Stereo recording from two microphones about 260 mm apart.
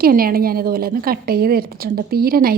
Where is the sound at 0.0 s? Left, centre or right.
Right.